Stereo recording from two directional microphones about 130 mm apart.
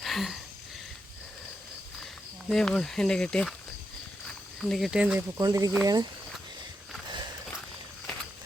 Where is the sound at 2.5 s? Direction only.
5° left (ahead or behind).